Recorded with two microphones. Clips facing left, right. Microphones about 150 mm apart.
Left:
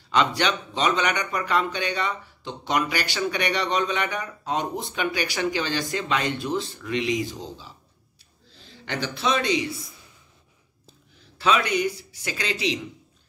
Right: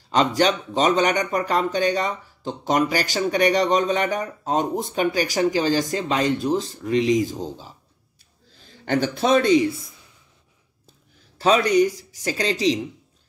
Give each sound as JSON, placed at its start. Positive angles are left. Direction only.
{"t": 0.1, "sound": "a man's voice", "side_deg": -40}
{"t": 11.3, "sound": "speech", "side_deg": -40}